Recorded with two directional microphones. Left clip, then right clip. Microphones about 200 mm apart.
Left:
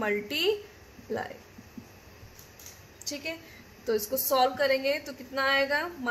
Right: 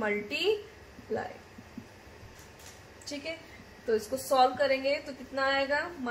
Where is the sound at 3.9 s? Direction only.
45° left (ahead or behind).